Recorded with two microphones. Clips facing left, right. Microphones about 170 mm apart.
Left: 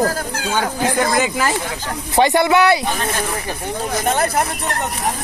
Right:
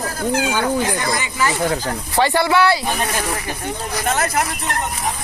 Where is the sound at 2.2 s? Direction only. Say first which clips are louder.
Left 2 dB; 20° left (ahead or behind).